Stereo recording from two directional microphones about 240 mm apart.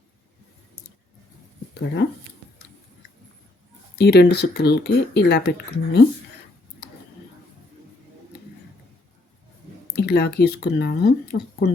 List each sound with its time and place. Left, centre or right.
1.7 s speech: left
3.9 s speech: left
9.9 s speech: left